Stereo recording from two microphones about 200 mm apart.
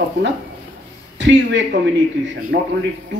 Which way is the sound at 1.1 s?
65° right (ahead or behind).